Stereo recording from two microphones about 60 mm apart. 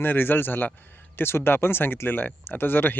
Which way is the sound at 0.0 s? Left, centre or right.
Left.